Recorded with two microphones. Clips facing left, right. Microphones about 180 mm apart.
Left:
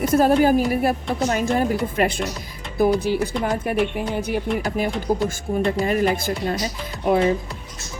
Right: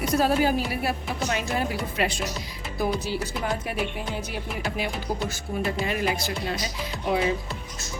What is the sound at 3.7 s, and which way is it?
Speech, 50° left (ahead or behind).